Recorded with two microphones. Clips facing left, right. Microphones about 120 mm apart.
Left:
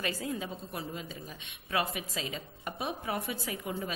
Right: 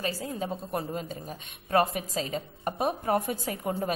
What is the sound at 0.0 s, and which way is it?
A woman's voice, 35° right (ahead or behind).